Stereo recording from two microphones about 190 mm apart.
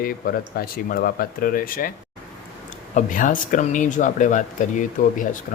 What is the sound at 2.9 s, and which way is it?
Speech, 45° left (ahead or behind).